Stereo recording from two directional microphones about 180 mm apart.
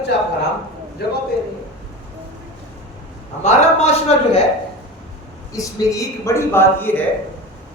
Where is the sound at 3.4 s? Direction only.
40° left (ahead or behind).